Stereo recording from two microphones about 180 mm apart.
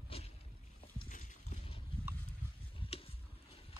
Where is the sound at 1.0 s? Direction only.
45° left (ahead or behind).